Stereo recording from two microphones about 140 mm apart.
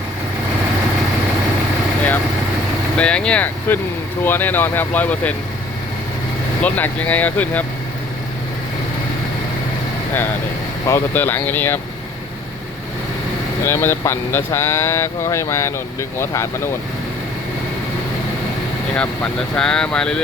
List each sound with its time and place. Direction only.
3.0 s speech: 5° left (ahead or behind)
6.6 s speech: 10° left (ahead or behind)
10.8 s speech: 15° left (ahead or behind)
13.7 s speech: 15° left (ahead or behind)
19.5 s speech: 5° left (ahead or behind)